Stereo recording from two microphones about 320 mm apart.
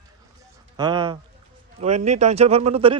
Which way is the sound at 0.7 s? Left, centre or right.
Centre.